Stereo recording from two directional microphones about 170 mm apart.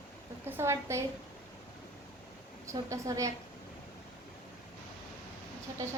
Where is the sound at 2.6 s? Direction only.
20° right (ahead or behind).